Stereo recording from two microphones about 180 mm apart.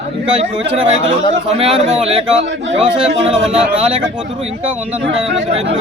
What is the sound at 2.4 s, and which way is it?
Speech, 90° right.